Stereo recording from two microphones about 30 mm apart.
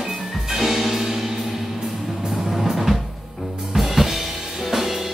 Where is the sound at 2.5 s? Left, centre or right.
Centre.